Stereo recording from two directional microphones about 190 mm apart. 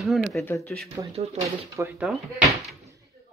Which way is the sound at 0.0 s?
Centre (ahead or behind).